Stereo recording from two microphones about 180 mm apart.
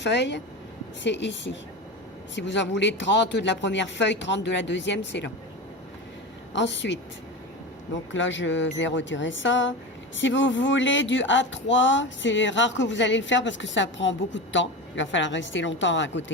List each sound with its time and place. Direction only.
0.0 s speech: 75° left (ahead or behind)
6.5 s speech: 90° left
8.1 s speech: 90° left